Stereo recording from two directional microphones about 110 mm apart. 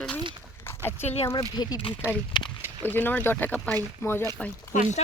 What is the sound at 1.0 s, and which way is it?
Speech, 75° left (ahead or behind).